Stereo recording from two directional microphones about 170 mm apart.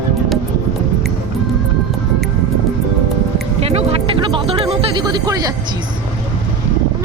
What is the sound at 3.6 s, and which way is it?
Music, 35° right (ahead or behind).